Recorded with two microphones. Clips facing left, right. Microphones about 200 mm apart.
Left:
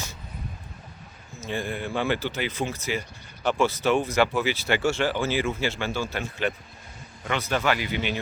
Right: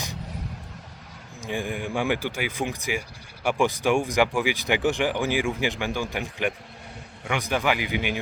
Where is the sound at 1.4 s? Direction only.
15° right (ahead or behind).